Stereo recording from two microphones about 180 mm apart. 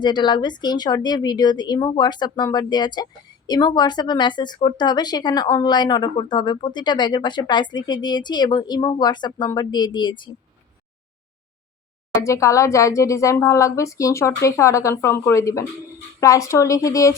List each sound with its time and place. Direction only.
0.0 s speech: 25° left (ahead or behind)
12.1 s speech: 15° left (ahead or behind)